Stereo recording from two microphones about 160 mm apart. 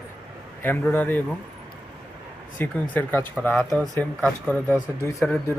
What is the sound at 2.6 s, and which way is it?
Speech, 10° left (ahead or behind).